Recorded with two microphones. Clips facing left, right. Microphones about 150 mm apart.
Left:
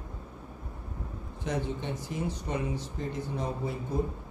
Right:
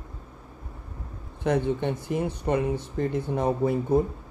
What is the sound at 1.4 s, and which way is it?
Speech, 60° right (ahead or behind).